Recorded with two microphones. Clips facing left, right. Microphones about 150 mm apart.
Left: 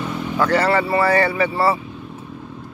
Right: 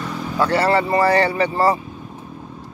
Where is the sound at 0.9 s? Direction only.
35° right (ahead or behind).